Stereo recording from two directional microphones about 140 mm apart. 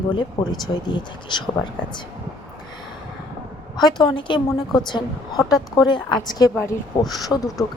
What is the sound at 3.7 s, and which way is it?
A woman's voice, 30° left (ahead or behind).